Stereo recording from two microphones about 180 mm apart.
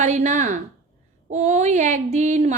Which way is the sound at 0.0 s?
40° right (ahead or behind).